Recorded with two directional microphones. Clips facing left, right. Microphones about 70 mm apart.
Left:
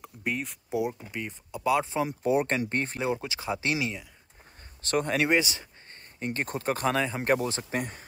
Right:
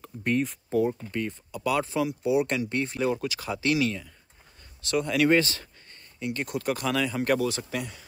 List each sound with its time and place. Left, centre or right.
0.0 s speech: centre; by 2.0 s left
2.0 s speech: left
3.1 s speech: left
4.8 s speech: left
5.3 s speech: centre
6.1 s speech: left